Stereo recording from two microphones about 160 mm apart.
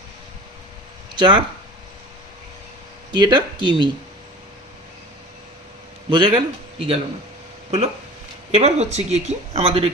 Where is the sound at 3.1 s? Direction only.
25° right (ahead or behind).